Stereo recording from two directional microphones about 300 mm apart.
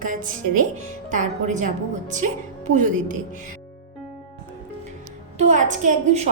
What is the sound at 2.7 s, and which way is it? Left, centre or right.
Speech, right.